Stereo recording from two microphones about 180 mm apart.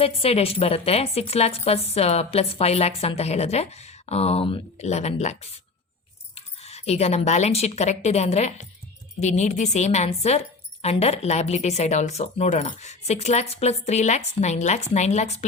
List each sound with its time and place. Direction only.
0.0 s a woman's voice: 35° left (ahead or behind)